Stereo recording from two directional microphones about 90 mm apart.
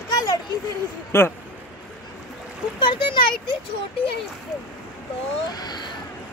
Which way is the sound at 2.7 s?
65° left (ahead or behind).